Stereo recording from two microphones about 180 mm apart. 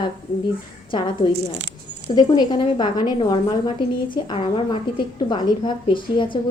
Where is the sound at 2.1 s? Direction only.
25° left (ahead or behind).